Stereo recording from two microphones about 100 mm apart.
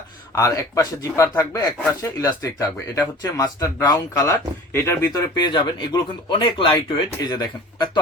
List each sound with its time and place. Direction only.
0.3 s speech: 35° left (ahead or behind)
5.4 s speech: 50° left (ahead or behind)
7.3 s speech: 45° left (ahead or behind)